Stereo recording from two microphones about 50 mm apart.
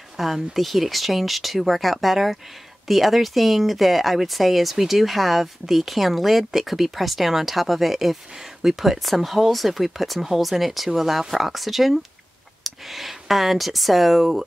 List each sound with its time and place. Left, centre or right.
0.2 s speech: centre